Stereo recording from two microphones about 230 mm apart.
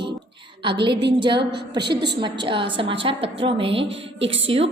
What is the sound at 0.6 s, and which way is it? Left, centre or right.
A woman's voice, right.